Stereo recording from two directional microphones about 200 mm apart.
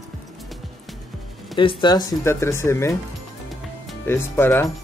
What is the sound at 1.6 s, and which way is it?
Speech, 25° left (ahead or behind).